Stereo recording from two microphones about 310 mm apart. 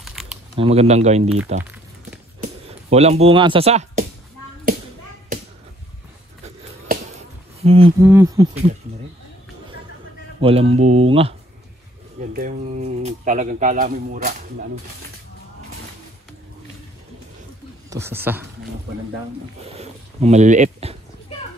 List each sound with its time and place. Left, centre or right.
0.0 s typing: centre
0.6 s speech: centre
2.4 s speech: right
7.6 s speech: centre
8.1 s speech: centre
10.4 s speech: centre
17.8 s speech: centre
19.6 s speech: centre